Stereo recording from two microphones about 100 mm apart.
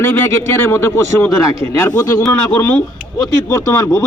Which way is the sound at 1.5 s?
70° right (ahead or behind).